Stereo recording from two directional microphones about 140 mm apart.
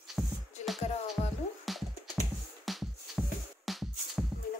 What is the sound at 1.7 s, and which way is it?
Music, centre (ahead or behind).